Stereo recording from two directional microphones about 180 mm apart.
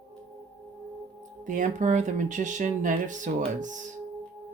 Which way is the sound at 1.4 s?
45° right (ahead or behind).